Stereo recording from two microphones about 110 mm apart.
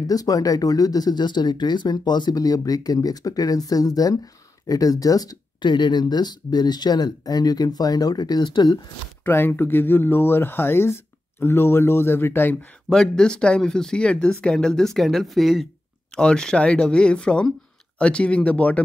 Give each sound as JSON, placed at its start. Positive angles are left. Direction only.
{"t": 0.0, "sound": "speech", "side_deg": 35}
{"t": 9.2, "sound": "speech", "side_deg": 20}
{"t": 12.9, "sound": "speech", "side_deg": 5}